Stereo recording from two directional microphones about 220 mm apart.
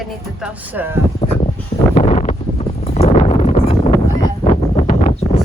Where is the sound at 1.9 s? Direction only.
30° left (ahead or behind).